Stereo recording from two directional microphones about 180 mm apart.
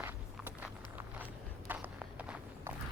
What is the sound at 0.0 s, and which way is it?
Walk, 10° right (ahead or behind).